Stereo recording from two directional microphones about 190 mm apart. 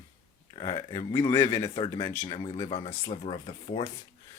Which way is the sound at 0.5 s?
25° left (ahead or behind).